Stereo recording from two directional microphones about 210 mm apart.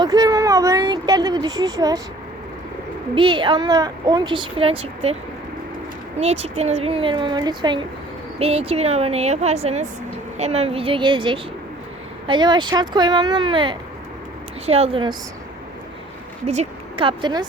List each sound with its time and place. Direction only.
0.0 s speech: 20° right (ahead or behind)
3.2 s speech: 20° right (ahead or behind)
6.1 s speech: 30° right (ahead or behind)
16.5 s speech: 30° right (ahead or behind)